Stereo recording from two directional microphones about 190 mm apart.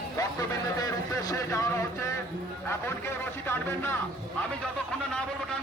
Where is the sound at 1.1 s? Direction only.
15° left (ahead or behind).